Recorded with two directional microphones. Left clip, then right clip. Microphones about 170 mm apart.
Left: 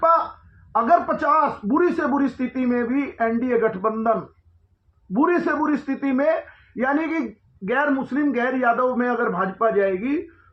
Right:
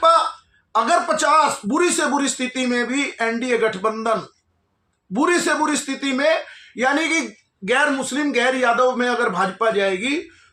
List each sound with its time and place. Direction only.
0.7 s speech: 20° right (ahead or behind)
5.1 s speech: 20° right (ahead or behind)